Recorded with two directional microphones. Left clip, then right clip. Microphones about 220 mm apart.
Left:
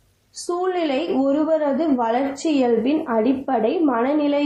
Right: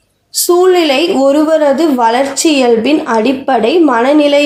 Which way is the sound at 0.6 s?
45° right (ahead or behind).